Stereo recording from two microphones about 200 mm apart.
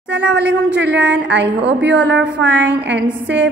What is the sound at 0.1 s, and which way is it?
A woman's voice, 60° right (ahead or behind).